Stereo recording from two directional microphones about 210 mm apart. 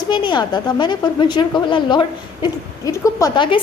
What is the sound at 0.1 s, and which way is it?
A woman's voice, 20° left (ahead or behind).